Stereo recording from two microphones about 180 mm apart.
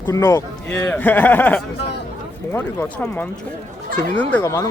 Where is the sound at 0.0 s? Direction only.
15° left (ahead or behind).